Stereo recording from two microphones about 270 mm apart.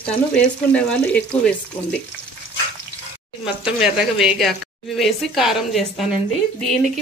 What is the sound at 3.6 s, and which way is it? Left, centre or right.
Speech, centre.